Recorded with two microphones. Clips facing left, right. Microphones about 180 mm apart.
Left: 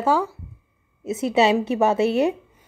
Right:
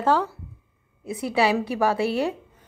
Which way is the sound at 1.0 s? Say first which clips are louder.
Left 4 dB; 25° left (ahead or behind).